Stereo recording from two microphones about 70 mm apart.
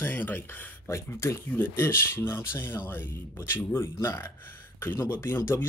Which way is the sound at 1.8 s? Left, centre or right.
Left.